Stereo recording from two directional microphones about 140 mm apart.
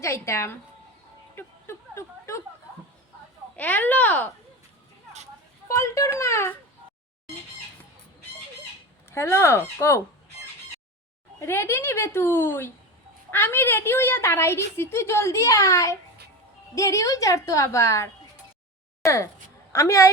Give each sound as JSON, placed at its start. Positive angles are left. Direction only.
{"t": 0.0, "sound": "a woman's voice", "side_deg": 20}
{"t": 1.4, "sound": "a sound", "side_deg": 20}
{"t": 3.5, "sound": "speech", "side_deg": 10}
{"t": 5.6, "sound": "a woman's voice", "side_deg": 20}
{"t": 9.0, "sound": "speech", "side_deg": 20}
{"t": 11.3, "sound": "a woman's voice", "side_deg": 15}